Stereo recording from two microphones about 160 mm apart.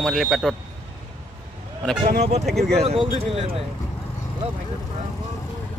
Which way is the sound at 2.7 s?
40° right (ahead or behind).